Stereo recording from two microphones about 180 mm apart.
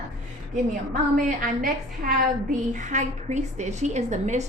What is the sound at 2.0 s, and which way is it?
A woman's voice, 45° right (ahead or behind).